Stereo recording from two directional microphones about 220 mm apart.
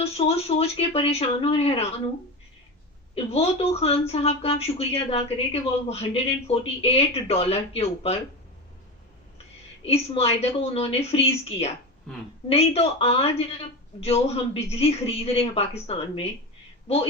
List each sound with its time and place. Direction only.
0.0 s speech: 25° left (ahead or behind)
3.2 s speech: 25° left (ahead or behind)
9.8 s speech: 25° left (ahead or behind)
12.5 s speech: 25° left (ahead or behind)